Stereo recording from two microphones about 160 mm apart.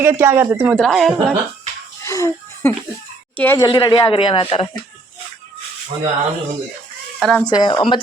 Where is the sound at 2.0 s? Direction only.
20° left (ahead or behind).